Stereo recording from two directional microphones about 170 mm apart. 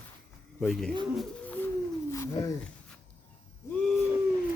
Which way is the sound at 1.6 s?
10° left (ahead or behind).